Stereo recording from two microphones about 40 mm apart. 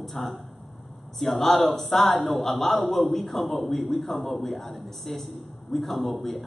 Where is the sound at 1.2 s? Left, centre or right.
Centre.